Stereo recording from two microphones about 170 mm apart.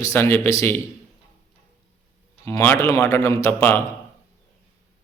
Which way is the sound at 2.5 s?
15° left (ahead or behind).